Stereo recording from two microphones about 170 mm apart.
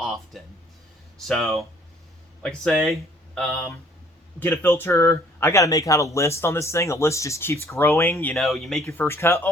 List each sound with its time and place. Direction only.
1.3 s speech: centre (ahead or behind)
8.9 s speech: 15° left (ahead or behind)